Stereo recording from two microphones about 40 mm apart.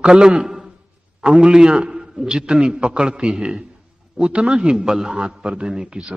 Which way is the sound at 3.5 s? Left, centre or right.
Centre.